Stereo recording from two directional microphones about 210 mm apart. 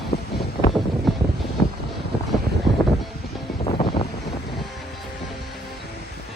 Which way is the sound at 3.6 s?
25° left (ahead or behind).